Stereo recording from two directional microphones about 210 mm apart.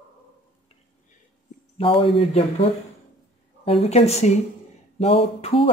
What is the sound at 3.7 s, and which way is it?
A woman's voice, 30° left (ahead or behind).